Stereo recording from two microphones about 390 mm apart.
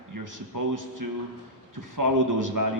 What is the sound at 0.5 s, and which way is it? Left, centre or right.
A man's voice, right.